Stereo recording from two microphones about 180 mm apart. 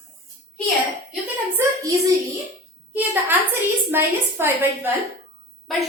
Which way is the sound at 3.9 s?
15° right (ahead or behind).